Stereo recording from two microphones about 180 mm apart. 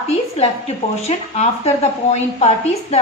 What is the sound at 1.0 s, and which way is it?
Speech, 35° left (ahead or behind).